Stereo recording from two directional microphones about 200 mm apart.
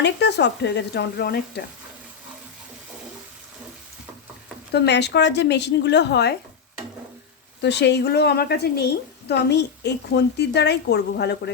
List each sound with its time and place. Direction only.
0.0 s a woman's voice: 60° left (ahead or behind)
4.7 s a woman's voice: 60° left (ahead or behind)
7.6 s a woman's voice: 60° left (ahead or behind)